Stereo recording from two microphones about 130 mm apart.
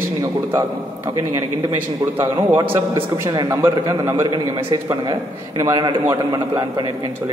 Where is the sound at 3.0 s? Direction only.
35° right (ahead or behind).